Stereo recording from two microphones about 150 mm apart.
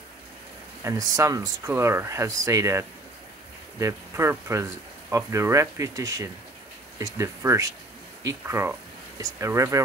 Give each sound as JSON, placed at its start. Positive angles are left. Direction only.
{"t": 0.8, "sound": "speech", "side_deg": -20}